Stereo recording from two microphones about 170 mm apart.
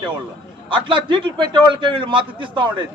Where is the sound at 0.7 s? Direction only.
30° right (ahead or behind).